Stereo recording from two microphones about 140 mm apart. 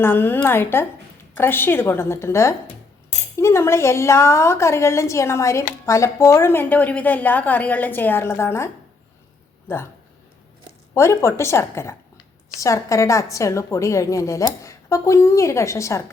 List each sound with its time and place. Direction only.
0.0 s a woman's voice: 15° left (ahead or behind)
10.9 s a woman's voice: 20° left (ahead or behind)